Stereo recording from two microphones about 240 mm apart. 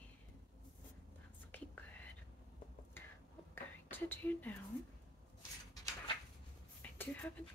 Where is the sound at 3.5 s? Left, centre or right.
Centre.